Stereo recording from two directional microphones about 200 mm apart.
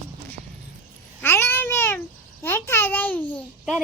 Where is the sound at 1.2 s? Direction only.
10° left (ahead or behind).